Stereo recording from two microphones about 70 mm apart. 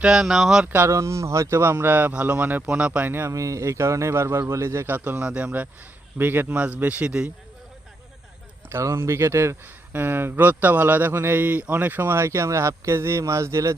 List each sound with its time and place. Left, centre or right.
0.0 s speech: centre
0.6 s speech: right
0.9 s speech: right; by 3.1 s centre
3.1 s speech: right
3.3 s a man's voice: right
4.9 s speech: right
6.1 s speech: right
8.7 s speech: right